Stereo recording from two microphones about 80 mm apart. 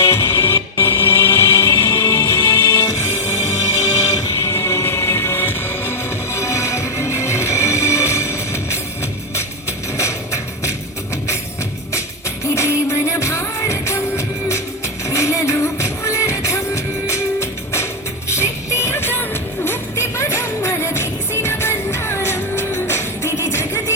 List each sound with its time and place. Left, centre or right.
0.0 s music: left
4.0 s music: left
10.0 s music: left
12.5 s music: left